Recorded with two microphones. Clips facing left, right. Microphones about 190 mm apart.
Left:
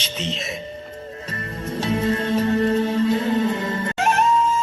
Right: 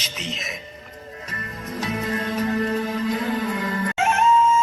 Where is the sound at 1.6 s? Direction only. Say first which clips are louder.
Left 5 dB; 30° left (ahead or behind).